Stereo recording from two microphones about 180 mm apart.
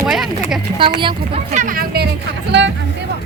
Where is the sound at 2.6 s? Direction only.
75° right (ahead or behind).